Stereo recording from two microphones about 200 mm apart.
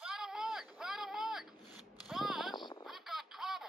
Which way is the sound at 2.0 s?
Centre (ahead or behind).